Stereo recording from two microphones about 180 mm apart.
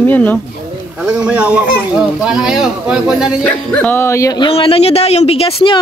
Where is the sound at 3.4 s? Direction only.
10° left (ahead or behind).